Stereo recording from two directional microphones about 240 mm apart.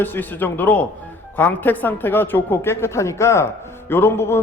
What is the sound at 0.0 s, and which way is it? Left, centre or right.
A man's voice, centre.